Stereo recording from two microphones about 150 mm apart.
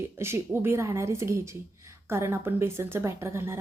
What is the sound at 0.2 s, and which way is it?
Speech, 15° right (ahead or behind).